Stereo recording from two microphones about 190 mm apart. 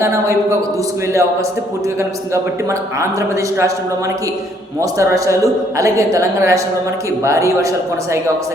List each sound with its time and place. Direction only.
0.0 s a woman's voice: 15° right (ahead or behind)
4.8 s a woman's voice: 15° right (ahead or behind)